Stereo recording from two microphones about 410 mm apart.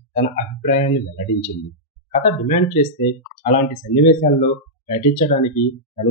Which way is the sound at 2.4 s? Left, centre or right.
Centre.